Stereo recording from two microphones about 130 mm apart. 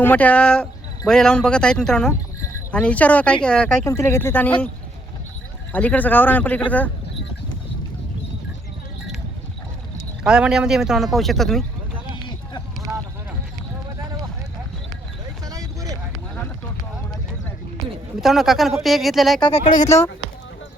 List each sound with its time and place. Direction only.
0.0 s speech: 15° left (ahead or behind)
3.8 s speech: 20° left (ahead or behind)
5.7 s speech: 10° left (ahead or behind)
10.2 s speech: 5° right (ahead or behind)
15.4 s a sound: 25° right (ahead or behind)
18.2 s speech: centre (ahead or behind)
19.6 s speech: 75° left (ahead or behind)